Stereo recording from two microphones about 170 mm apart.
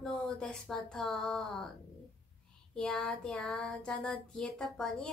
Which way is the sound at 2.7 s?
5° left (ahead or behind).